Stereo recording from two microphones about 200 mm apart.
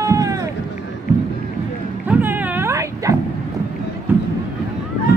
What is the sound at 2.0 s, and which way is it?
Dog, 10° right (ahead or behind).